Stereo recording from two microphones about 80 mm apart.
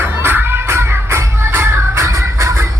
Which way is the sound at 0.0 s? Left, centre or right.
Right.